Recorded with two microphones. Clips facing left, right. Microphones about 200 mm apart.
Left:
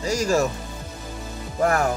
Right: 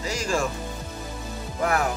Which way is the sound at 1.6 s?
45° left (ahead or behind).